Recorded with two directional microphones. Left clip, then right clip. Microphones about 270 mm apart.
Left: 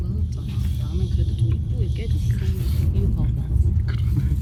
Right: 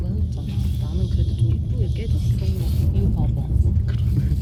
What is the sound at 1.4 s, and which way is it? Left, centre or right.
Speech, centre.